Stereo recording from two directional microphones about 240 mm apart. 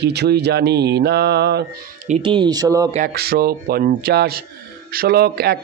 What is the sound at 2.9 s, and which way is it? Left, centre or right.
Mantra, right.